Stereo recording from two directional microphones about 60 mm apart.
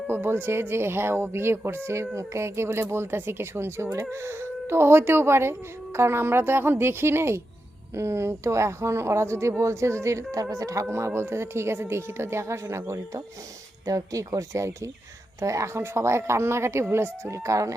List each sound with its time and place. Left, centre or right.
0.1 s speech: right
10.3 s speech: right
10.9 s speech: right
13.8 s speech: right